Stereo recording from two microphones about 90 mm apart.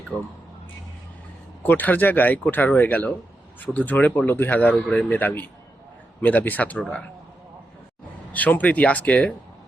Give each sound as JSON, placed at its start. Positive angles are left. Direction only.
{"t": 0.1, "sound": "speech", "side_deg": 15}
{"t": 1.6, "sound": "speech", "side_deg": 20}
{"t": 8.3, "sound": "speech", "side_deg": 15}